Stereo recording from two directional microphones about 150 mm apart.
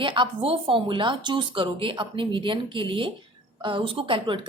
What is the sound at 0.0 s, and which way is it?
A woman's voice, 35° right (ahead or behind).